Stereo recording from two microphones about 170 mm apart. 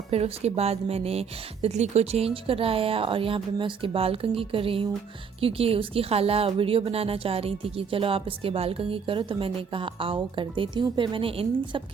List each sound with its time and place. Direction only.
0.1 s a woman's voice: 35° right (ahead or behind)